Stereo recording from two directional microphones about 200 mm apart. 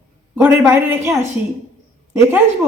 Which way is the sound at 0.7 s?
10° right (ahead or behind).